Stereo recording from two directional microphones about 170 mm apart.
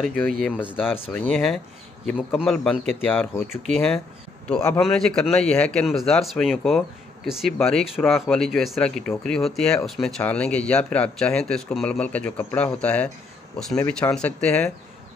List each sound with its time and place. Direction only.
0.2 s speech: 5° left (ahead or behind)